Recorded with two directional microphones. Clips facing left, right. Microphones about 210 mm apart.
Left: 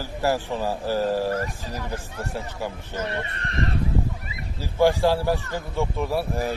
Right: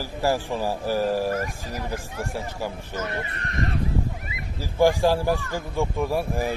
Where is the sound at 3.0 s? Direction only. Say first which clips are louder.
Left 1 dB; 30° left (ahead or behind).